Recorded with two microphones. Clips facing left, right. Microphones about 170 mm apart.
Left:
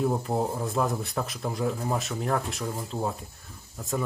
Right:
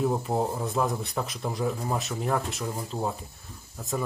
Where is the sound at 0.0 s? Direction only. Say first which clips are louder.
Even; centre (ahead or behind).